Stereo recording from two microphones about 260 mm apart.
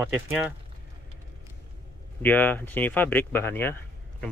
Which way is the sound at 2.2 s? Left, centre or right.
Centre.